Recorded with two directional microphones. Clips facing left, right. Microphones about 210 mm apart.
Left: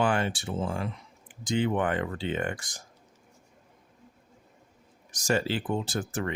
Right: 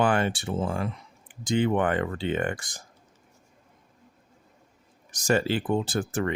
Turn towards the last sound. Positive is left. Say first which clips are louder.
# right 4 dB
turn(degrees=-55)  # may be behind; listen again after turning